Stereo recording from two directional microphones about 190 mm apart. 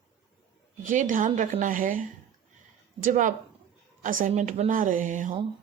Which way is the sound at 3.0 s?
45° right (ahead or behind).